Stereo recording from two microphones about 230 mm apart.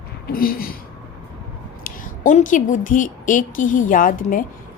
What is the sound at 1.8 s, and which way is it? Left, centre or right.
A woman's voice, left.